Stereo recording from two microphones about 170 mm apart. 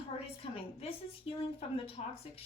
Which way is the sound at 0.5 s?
35° left (ahead or behind).